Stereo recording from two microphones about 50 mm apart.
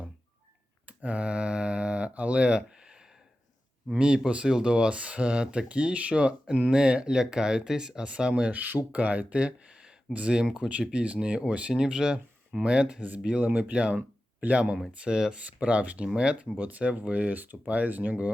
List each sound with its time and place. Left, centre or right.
0.9 s mantra: right
3.9 s speech: right